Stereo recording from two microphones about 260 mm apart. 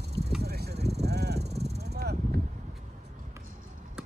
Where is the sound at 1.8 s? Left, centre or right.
Right.